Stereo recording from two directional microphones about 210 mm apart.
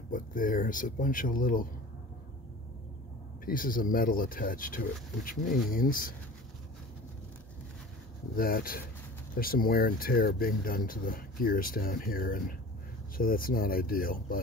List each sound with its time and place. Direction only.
0.1 s speech: 40° left (ahead or behind)
3.4 s speech: 40° left (ahead or behind)
8.4 s speech: 45° left (ahead or behind)